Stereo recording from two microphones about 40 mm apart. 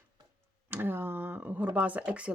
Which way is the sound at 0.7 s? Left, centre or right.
Right.